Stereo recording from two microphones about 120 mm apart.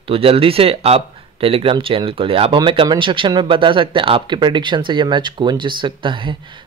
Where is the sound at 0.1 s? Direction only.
50° right (ahead or behind).